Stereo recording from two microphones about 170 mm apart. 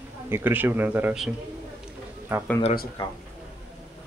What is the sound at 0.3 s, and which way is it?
Speech, 10° right (ahead or behind).